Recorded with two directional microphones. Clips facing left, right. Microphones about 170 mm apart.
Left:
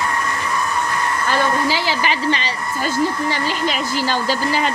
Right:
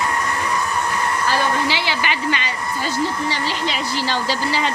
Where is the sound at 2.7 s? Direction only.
50° left (ahead or behind).